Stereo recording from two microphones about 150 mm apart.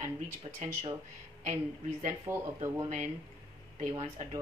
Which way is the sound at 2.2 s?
15° right (ahead or behind).